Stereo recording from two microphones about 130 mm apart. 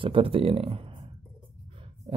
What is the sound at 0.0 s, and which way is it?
Speech, 40° right (ahead or behind).